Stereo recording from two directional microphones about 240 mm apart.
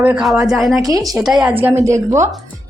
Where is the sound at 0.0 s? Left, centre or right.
Centre.